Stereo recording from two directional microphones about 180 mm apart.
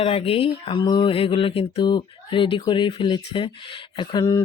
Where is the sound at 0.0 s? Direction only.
30° left (ahead or behind).